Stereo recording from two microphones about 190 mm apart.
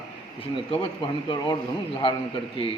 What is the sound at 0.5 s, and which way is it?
A man's voice, 25° left (ahead or behind).